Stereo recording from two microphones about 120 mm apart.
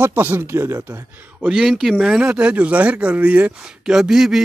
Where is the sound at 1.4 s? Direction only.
5° right (ahead or behind).